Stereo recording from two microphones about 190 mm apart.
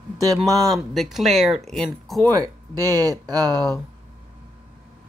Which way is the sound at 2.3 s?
20° right (ahead or behind).